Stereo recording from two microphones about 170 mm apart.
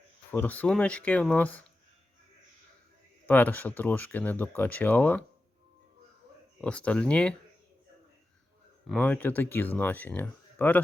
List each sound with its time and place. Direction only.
0.3 s speech: 10° left (ahead or behind)
3.2 s speech: 10° left (ahead or behind)
6.6 s speech: 5° left (ahead or behind)
8.9 s speech: 10° left (ahead or behind)